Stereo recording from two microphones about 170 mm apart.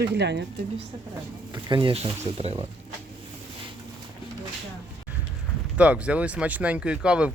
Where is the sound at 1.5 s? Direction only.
30° right (ahead or behind).